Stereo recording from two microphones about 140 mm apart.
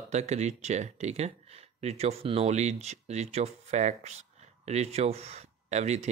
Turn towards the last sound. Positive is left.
turn(degrees=-55)  # may be behind; listen again after turning